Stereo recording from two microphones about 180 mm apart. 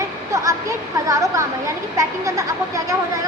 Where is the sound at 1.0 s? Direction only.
20° right (ahead or behind).